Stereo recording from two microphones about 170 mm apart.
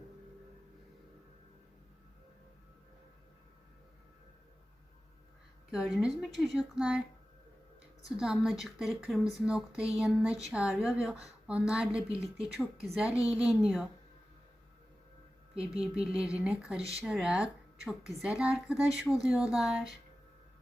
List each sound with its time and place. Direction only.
5.7 s speech: 5° right (ahead or behind)
8.1 s speech: centre (ahead or behind)
13.1 s a woman's voice: 20° left (ahead or behind)
13.3 s speech: 5° right (ahead or behind)
15.8 s speech: 5° right (ahead or behind)